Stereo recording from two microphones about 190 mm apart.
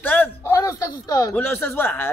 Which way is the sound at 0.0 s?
10° left (ahead or behind).